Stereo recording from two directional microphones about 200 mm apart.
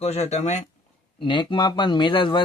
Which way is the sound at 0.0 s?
30° left (ahead or behind).